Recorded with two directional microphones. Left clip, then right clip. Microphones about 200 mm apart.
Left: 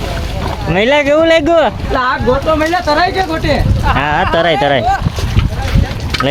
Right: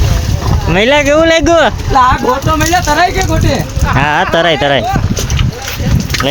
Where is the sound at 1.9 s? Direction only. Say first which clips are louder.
Right 7 dB; 50° right (ahead or behind).